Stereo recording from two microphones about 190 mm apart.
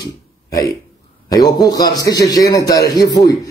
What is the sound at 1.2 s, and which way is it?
A man's voice, 20° left (ahead or behind).